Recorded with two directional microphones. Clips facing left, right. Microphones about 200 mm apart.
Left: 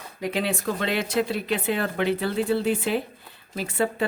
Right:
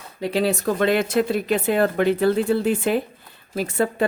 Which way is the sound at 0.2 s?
35° right (ahead or behind).